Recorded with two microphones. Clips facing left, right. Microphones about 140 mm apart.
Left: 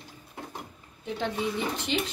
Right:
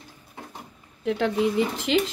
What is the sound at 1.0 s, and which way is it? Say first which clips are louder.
Speech: right 7 dB; 90° right.